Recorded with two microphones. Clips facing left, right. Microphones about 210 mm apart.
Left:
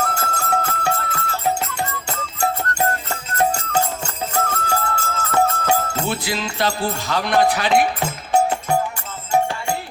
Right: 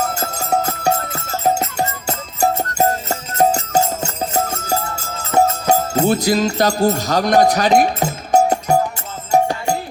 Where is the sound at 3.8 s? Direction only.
25° right (ahead or behind).